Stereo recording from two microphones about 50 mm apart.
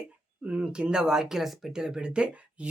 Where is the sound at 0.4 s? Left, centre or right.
Right.